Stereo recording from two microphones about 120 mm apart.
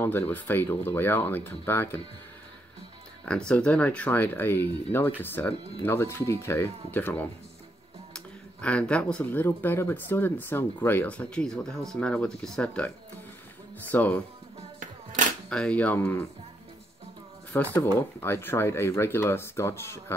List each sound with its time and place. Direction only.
0.0 s speech: 15° left (ahead or behind)
3.3 s speech: 10° left (ahead or behind)
8.5 s speech: 10° left (ahead or behind)
15.5 s speech: 10° left (ahead or behind)
16.0 s speech: 20° left (ahead or behind)
17.5 s speech: 15° left (ahead or behind)